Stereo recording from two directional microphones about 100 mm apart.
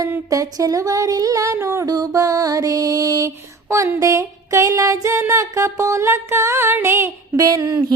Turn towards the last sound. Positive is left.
turn(degrees=-35)  # may be behind; listen again after turning